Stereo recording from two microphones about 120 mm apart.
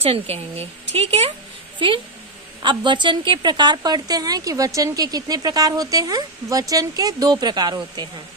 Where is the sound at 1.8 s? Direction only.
45° right (ahead or behind).